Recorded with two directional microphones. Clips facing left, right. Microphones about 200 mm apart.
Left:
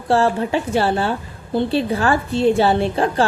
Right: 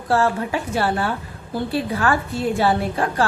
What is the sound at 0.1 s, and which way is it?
A woman's voice, 25° left (ahead or behind).